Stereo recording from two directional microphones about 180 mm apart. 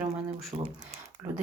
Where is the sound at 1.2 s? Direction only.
15° right (ahead or behind).